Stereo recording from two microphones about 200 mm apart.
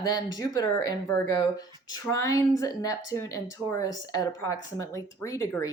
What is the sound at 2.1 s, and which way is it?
Speech, 15° left (ahead or behind).